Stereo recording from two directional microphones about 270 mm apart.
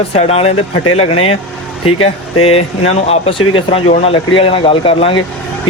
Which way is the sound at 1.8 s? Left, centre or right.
Left.